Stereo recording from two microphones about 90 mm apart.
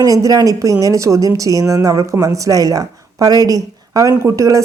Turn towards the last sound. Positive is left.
turn(degrees=-35)  # may be behind; listen again after turning